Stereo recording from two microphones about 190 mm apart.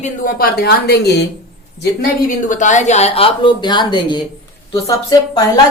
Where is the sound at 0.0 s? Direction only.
50° left (ahead or behind).